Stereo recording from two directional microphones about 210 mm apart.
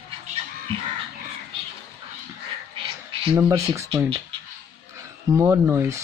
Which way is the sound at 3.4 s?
15° right (ahead or behind).